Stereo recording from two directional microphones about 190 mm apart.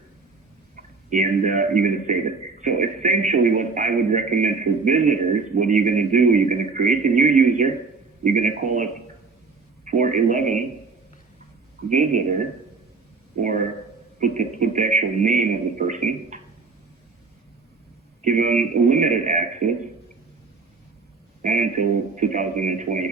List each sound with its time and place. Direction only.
0.8 s a man's voice: 40° right (ahead or behind)
11.9 s speech: 40° right (ahead or behind)
18.2 s speech: 40° right (ahead or behind)
21.4 s speech: 40° right (ahead or behind)